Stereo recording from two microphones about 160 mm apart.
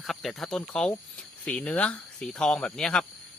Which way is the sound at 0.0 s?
Centre (ahead or behind).